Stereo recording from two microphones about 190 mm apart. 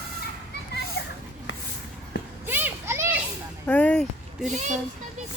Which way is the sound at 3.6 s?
5° left (ahead or behind).